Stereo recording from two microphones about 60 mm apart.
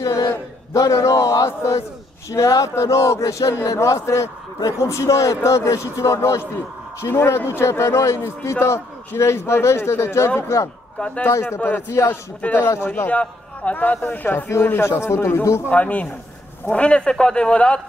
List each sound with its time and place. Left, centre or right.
0.7 s a man's voice: left
12.4 s a man's voice: left
12.8 s speech: left
13.1 s a man's voice: left
14.5 s a man's voice: left
15.7 s a man's voice: left